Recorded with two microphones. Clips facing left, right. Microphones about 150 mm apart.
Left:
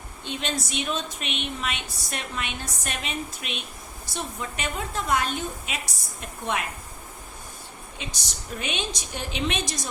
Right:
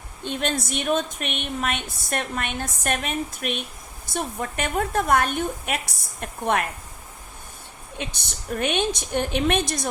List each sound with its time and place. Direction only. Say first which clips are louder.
0.3 s a woman's voice: right 4 dB; 50° right (ahead or behind)
7.9 s a woman's voice: right 6 dB; 55° right (ahead or behind)